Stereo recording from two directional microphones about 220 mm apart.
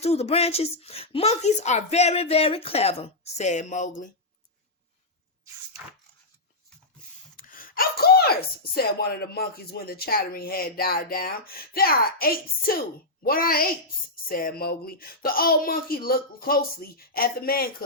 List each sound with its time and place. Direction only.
0.0 s a woman's voice: 30° left (ahead or behind)
7.3 s speech: 40° left (ahead or behind)